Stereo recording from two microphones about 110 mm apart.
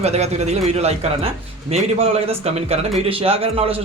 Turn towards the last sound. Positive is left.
turn(degrees=-60)  # may be behind; listen again after turning